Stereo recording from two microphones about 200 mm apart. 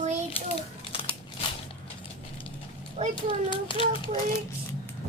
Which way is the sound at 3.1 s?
25° left (ahead or behind).